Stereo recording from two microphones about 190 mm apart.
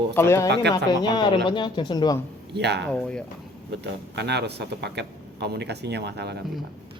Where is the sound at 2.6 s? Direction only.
60° right (ahead or behind).